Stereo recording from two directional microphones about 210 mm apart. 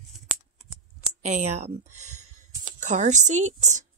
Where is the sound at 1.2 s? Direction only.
30° right (ahead or behind).